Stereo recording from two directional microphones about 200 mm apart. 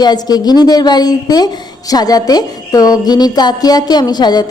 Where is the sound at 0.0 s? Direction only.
20° left (ahead or behind).